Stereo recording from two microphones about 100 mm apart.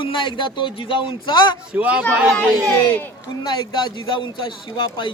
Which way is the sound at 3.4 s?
50° left (ahead or behind).